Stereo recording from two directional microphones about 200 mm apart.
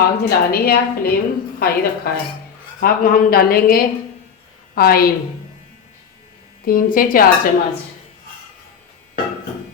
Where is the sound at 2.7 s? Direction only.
45° left (ahead or behind).